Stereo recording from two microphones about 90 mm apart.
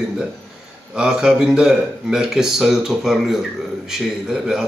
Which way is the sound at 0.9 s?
10° right (ahead or behind).